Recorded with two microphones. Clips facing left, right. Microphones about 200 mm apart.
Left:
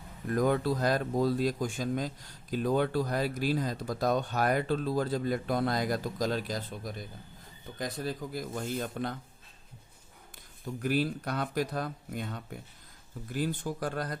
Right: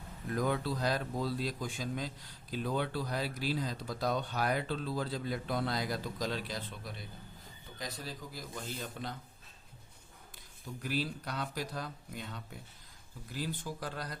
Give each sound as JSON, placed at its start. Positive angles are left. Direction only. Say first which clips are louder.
{"t": 0.3, "sound": "speech", "louder": "left 6 dB", "side_deg": 50}
{"t": 10.8, "sound": "speech", "louder": "left 7 dB", "side_deg": 55}